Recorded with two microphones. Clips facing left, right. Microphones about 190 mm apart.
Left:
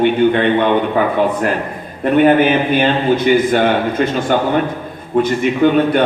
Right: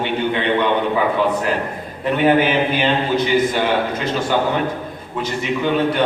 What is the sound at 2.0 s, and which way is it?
A man's voice, 50° left (ahead or behind).